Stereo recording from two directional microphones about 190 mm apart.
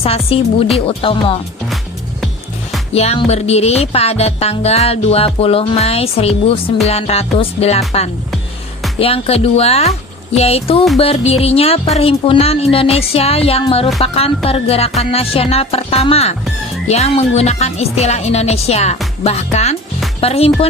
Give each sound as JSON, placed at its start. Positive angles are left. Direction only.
{"t": 0.0, "sound": "speech", "side_deg": 30}
{"t": 2.9, "sound": "music", "side_deg": 35}